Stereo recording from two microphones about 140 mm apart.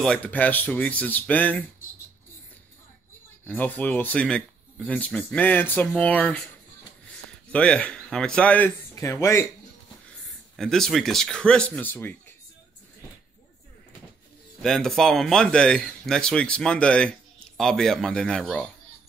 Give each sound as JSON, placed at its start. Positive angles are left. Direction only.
{"t": 0.0, "sound": "speech", "side_deg": 10}
{"t": 3.4, "sound": "speech", "side_deg": 10}
{"t": 7.5, "sound": "speech", "side_deg": 10}
{"t": 8.9, "sound": "speech", "side_deg": 20}
{"t": 10.5, "sound": "speech", "side_deg": 0}
{"t": 14.6, "sound": "speech", "side_deg": 5}